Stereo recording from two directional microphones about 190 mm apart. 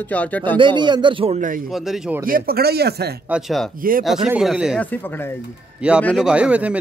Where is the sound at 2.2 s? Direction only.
50° right (ahead or behind).